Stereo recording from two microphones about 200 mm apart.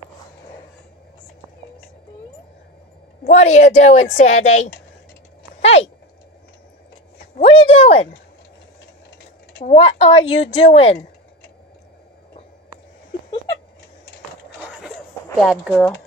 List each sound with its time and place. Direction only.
3.3 s a woman's voice: 35° left (ahead or behind)
7.3 s a woman's voice: 30° left (ahead or behind)
9.7 s a woman's voice: 30° left (ahead or behind)
14.6 s a sound: centre (ahead or behind)
15.3 s speech: centre (ahead or behind)